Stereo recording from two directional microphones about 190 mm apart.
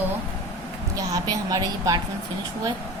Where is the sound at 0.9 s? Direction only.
20° right (ahead or behind).